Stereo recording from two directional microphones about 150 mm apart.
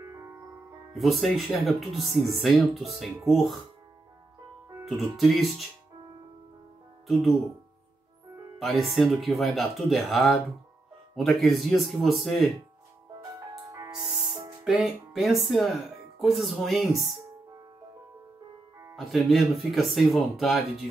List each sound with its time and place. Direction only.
0.9 s speech: centre (ahead or behind)
4.8 s speech: centre (ahead or behind)
7.1 s speech: centre (ahead or behind)
8.5 s speech: centre (ahead or behind)
13.7 s music: 25° right (ahead or behind)
14.0 s music: centre (ahead or behind)
14.6 s speech: 5° right (ahead or behind)
18.9 s speech: centre (ahead or behind)